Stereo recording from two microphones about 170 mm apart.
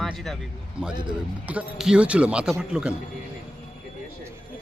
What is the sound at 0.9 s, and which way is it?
Speech, 25° right (ahead or behind).